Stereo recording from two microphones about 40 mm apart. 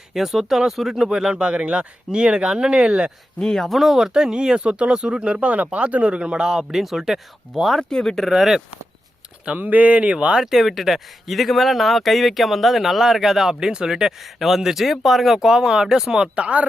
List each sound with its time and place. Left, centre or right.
0.1 s speech: centre
1.3 s speech: right
3.4 s speech: centre
3.7 s speech: centre; by 6.1 s right
6.1 s speech: right; by 7.8 s centre
7.8 s speech: centre
8.3 s speech: centre
9.6 s speech: right
10.4 s speech: centre
16.3 s speech: right